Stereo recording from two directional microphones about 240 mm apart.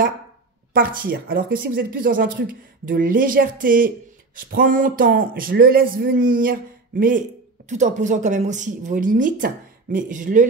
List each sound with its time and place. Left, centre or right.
0.7 s speech: right